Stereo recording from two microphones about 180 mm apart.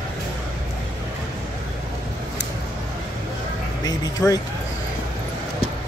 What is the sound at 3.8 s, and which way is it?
Speech, 20° left (ahead or behind).